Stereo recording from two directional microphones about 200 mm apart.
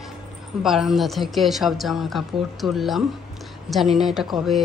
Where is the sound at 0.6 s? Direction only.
Centre (ahead or behind).